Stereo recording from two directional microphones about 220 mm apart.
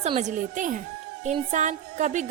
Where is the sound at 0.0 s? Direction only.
30° right (ahead or behind).